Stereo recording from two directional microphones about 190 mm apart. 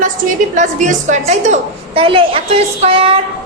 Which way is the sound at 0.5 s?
40° right (ahead or behind).